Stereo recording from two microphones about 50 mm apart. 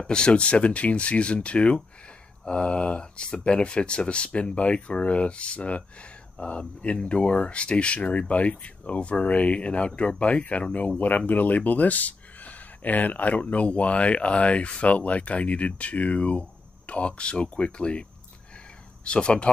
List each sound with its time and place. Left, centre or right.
0.0 s speech: centre
19.0 s speech: centre